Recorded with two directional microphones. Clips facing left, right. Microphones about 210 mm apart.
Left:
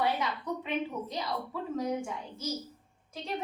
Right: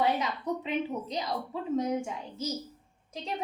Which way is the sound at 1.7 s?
25° right (ahead or behind).